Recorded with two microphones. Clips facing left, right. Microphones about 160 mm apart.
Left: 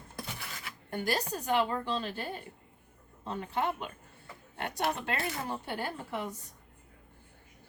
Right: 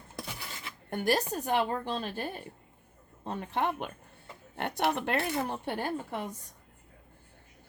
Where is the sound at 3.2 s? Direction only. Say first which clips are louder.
Right 1 dB; 60° right (ahead or behind).